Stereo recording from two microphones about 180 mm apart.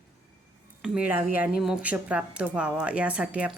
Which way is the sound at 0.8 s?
5° right (ahead or behind).